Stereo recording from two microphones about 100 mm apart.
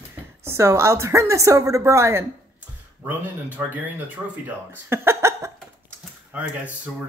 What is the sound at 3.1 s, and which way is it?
Speech, 15° right (ahead or behind).